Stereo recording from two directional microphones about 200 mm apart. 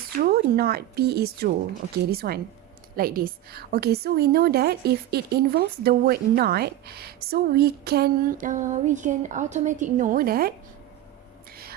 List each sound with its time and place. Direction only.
0.2 s a woman's voice: 50° right (ahead or behind)